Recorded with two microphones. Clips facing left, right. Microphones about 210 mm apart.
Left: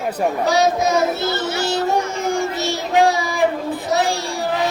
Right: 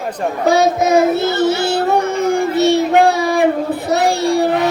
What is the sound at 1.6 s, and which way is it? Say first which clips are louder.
Child singing: right 4 dB; 60° right (ahead or behind).